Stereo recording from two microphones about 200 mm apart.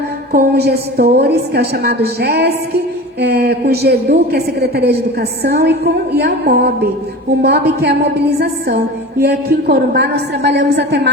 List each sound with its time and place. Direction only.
0.3 s a woman's voice: 55° right (ahead or behind)